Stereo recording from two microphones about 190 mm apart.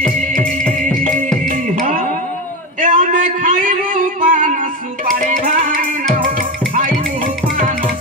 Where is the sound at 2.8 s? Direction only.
45° right (ahead or behind).